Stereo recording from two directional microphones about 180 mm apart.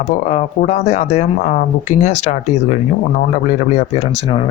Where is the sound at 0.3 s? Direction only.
45° left (ahead or behind).